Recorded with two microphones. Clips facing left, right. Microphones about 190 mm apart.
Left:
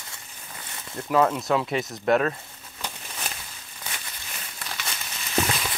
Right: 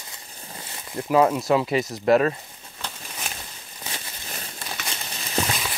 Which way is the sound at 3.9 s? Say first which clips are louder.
Right 3 dB; 35° right (ahead or behind).